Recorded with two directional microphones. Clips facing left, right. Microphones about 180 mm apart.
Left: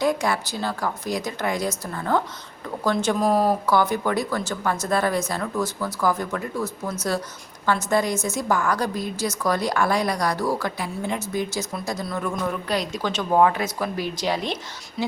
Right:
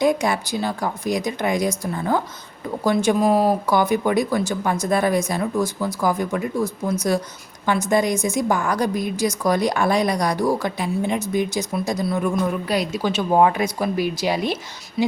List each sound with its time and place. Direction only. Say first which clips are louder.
0.0 s a woman's voice: right 3 dB; 15° right (ahead or behind)